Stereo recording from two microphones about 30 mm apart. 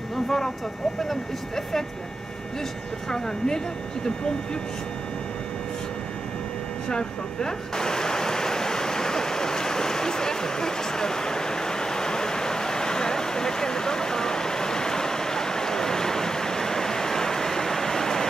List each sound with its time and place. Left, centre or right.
0.1 s vehicle: centre
3.1 s speech: centre
6.9 s a sound: left